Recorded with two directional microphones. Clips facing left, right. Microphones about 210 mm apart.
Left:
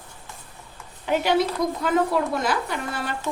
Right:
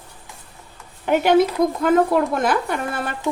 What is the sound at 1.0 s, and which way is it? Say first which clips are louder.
A woman's voice: right 6 dB; 55° right (ahead or behind).